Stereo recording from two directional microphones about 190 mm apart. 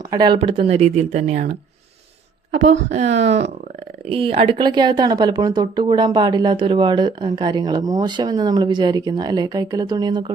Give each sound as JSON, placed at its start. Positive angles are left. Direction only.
{"t": 0.1, "sound": "speech", "side_deg": -20}
{"t": 3.2, "sound": "speech", "side_deg": -35}